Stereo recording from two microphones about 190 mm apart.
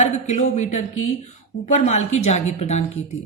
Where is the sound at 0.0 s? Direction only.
40° left (ahead or behind).